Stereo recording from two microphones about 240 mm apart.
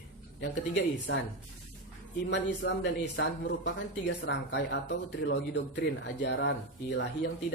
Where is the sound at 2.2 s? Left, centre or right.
Left.